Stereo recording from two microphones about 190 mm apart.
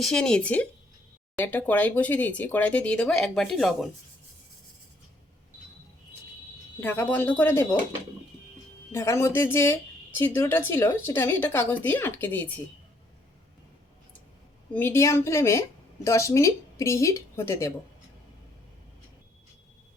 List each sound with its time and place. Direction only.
0.0 s speech: 5° left (ahead or behind)
6.7 s speech: 10° left (ahead or behind)
8.9 s speech: 15° left (ahead or behind)
14.7 s speech: 10° left (ahead or behind)